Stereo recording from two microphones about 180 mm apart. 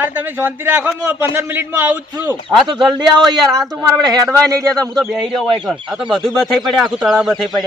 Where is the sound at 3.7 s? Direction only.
20° right (ahead or behind).